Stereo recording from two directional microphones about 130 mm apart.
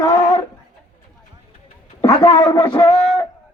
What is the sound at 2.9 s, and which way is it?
Speech, 50° left (ahead or behind).